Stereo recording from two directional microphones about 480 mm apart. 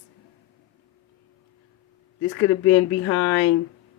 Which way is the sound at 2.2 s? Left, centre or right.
Left.